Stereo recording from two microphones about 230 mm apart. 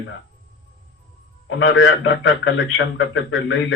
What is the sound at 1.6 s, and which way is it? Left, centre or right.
A man's voice, left.